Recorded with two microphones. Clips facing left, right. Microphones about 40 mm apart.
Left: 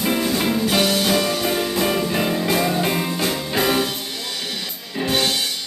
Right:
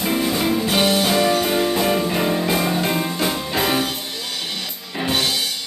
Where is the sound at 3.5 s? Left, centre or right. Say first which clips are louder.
Left 2 dB; centre.